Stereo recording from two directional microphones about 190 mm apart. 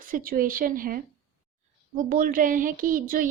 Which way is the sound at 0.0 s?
45° right (ahead or behind).